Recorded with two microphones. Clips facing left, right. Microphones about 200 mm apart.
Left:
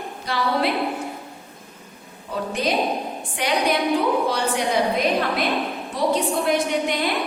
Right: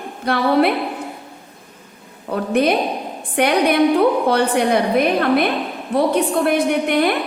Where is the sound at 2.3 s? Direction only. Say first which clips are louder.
Right 7 dB; 60° right (ahead or behind).